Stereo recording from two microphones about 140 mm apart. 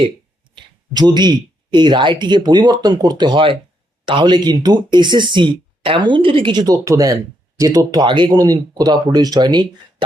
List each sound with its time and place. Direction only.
0.5 s speech: 30° right (ahead or behind)